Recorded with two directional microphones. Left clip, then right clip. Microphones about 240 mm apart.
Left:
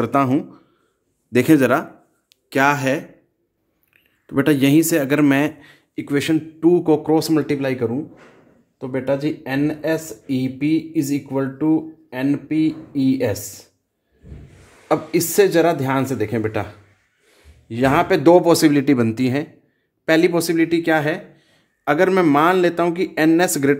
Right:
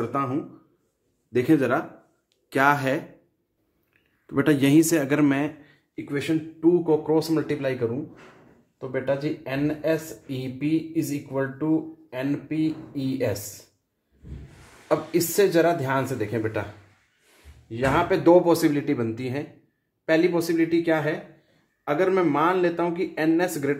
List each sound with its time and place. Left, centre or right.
0.0 s a man's voice: left
2.5 s speech: centre
5.6 s speech: left
14.9 s speech: left
17.6 s speech: left